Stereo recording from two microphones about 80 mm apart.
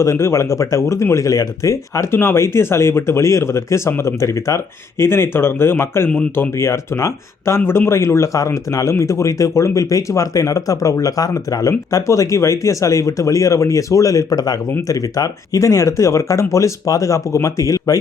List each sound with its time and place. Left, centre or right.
0.0 s speech: left